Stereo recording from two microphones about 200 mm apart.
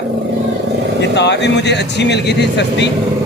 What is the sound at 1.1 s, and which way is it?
Speech, 60° left (ahead or behind).